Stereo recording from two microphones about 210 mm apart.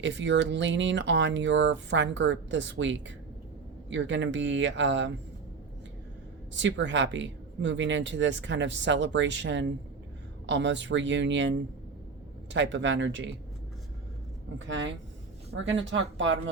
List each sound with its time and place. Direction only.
0.0 s speech: 60° right (ahead or behind)
6.5 s speech: 60° right (ahead or behind)
14.6 s speech: 60° right (ahead or behind)